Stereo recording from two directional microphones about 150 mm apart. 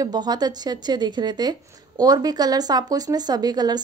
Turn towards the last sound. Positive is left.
turn(degrees=-25)  # may be behind; listen again after turning